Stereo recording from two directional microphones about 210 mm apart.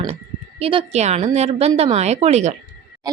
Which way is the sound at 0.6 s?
25° right (ahead or behind).